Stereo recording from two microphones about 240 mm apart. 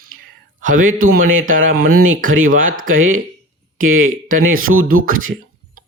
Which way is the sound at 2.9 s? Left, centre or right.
Right.